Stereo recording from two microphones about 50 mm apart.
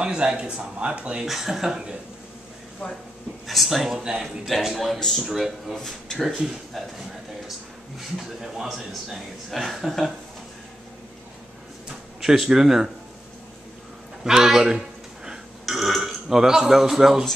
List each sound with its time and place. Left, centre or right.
0.0 s a man's voice: centre
1.2 s speech: centre
3.4 s speech: centre
5.9 s speech: centre
6.2 s speech: centre
8.4 s speech: centre
12.2 s speech: centre
14.2 s a sound: centre
15.6 s speech: centre